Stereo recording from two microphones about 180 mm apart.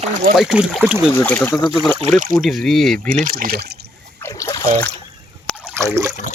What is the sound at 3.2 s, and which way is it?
Speech, 50° right (ahead or behind).